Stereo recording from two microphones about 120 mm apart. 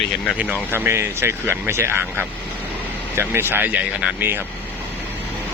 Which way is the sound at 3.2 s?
20° right (ahead or behind).